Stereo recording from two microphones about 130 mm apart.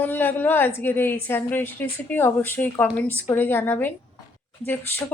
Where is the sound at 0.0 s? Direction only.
15° left (ahead or behind).